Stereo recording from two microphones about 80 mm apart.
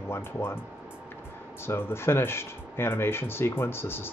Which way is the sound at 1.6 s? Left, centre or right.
Left.